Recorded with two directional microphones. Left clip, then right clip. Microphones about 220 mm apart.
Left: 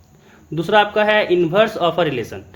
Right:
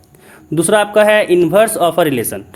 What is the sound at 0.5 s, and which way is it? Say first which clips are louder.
Speech: right 4 dB; 35° right (ahead or behind).